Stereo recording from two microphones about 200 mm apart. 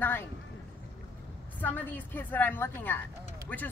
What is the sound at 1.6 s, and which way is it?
A woman's voice, 10° left (ahead or behind).